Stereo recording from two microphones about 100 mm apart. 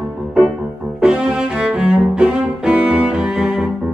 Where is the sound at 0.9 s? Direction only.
5° right (ahead or behind).